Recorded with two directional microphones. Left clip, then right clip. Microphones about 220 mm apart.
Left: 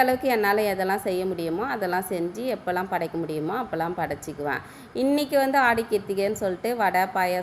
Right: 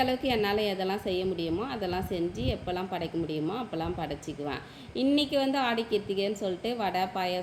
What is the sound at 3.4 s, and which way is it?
Speech, 30° left (ahead or behind).